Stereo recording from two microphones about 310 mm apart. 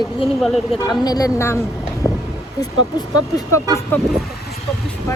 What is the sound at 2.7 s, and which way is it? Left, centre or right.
Speech, right.